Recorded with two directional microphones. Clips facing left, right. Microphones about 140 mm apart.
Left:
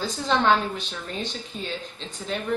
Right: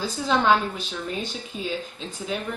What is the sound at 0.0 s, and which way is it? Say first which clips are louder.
A woman's voice: even; 5° right (ahead or behind).